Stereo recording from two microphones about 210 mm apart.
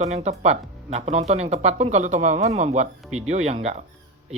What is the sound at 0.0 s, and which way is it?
Speech, 30° right (ahead or behind).